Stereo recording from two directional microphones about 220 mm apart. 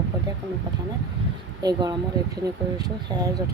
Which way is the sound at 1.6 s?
20° right (ahead or behind).